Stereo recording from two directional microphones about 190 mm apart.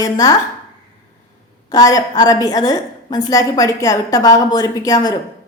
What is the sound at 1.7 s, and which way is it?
A woman's voice, 20° left (ahead or behind).